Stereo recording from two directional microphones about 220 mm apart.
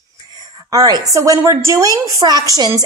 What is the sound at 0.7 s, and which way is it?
A woman's voice, 15° right (ahead or behind).